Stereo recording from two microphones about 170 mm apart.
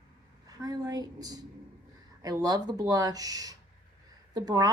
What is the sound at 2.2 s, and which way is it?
Speech, 20° right (ahead or behind).